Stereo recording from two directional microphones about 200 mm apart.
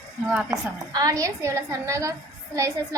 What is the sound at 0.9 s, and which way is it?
A woman's voice, 20° right (ahead or behind).